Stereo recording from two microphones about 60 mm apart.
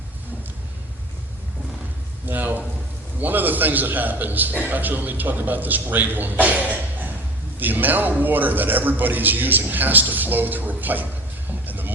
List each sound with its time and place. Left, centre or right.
2.2 s a man's voice: right
11.6 s music: right